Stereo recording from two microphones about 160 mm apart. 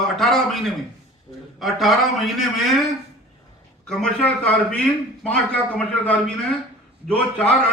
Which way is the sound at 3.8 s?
5° left (ahead or behind).